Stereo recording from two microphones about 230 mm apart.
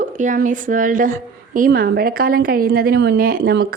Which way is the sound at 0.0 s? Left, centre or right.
Right.